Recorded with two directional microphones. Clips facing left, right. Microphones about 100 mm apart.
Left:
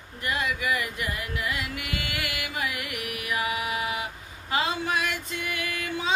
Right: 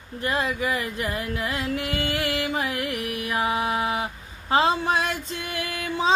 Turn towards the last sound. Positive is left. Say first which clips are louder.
# right 5 dB
turn(degrees=-30)  # may be behind; listen again after turning